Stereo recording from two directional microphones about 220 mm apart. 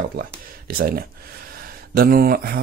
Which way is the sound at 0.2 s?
40° right (ahead or behind).